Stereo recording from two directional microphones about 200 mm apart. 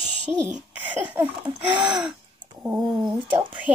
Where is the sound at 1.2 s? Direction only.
10° right (ahead or behind).